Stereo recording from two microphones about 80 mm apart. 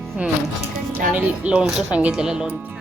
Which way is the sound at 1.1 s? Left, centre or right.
Centre.